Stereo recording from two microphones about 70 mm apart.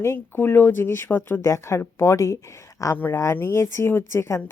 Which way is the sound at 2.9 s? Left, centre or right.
Left.